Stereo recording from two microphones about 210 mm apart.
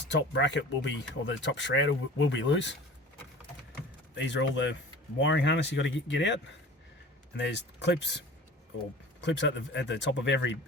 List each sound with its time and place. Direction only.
0.1 s speech: 60° left (ahead or behind)
4.1 s speech: 60° left (ahead or behind)
9.2 s speech: 60° left (ahead or behind)